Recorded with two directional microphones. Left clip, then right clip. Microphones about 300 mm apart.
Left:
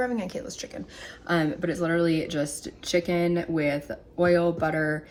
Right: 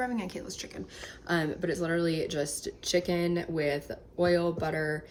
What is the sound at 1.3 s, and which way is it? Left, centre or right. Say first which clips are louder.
Speech: left 4 dB; centre.